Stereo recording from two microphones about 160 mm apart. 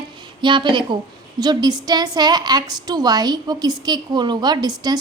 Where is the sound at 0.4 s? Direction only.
30° right (ahead or behind).